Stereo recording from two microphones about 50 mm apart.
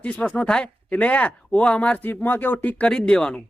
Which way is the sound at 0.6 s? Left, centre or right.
Left.